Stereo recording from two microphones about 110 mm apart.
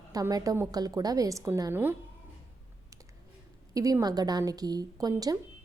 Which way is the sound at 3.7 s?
30° right (ahead or behind).